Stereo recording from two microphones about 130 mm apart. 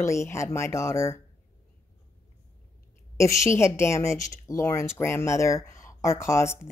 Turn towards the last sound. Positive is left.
turn(degrees=20)  # may be behind; listen again after turning